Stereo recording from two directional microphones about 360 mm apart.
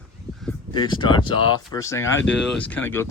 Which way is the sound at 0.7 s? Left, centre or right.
Centre.